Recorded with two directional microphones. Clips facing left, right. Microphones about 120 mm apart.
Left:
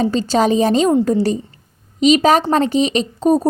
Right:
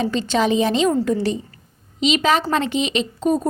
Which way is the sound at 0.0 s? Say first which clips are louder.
Left 4 dB; 35° left (ahead or behind).